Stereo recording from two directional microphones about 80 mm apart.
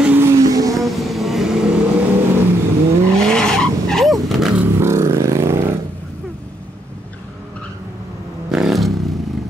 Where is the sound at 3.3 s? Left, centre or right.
Centre.